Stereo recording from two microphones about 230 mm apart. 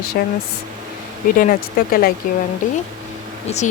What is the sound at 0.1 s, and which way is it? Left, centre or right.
Speech, left.